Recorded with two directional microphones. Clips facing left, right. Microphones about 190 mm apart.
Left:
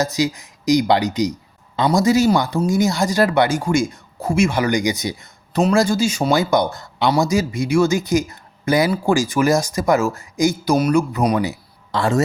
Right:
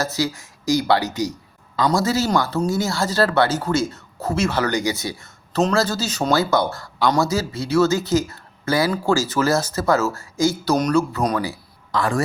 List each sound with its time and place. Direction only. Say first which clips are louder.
0.0 s speech: left 3 dB; 15° left (ahead or behind)
11.4 s a man's voice: left 3 dB; 25° left (ahead or behind)